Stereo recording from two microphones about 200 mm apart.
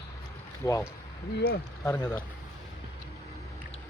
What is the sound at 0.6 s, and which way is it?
Speech, 15° left (ahead or behind).